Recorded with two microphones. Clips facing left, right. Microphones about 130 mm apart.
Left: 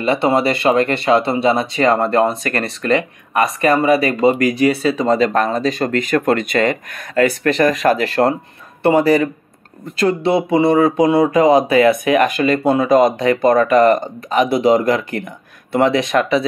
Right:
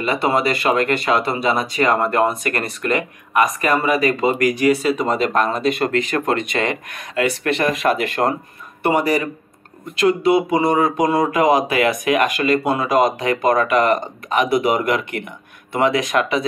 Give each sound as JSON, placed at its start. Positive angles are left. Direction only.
{"t": 0.0, "sound": "speech", "side_deg": 30}